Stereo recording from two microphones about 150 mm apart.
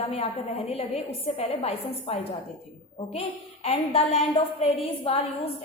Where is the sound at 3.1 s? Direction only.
45° left (ahead or behind).